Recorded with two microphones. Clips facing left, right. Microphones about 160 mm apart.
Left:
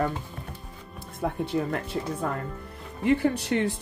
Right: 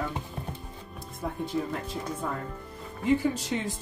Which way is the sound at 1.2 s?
65° left (ahead or behind).